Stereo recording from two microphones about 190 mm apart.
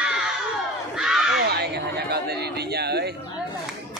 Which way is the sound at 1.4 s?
60° right (ahead or behind).